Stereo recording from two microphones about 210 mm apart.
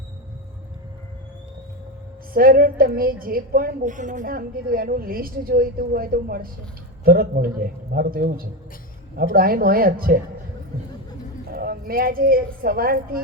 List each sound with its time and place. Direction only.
2.3 s a woman's voice: 45° right (ahead or behind)
11.5 s a woman's voice: 45° right (ahead or behind)